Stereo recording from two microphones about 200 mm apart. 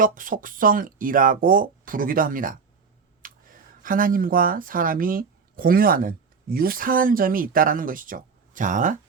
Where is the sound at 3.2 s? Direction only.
45° right (ahead or behind).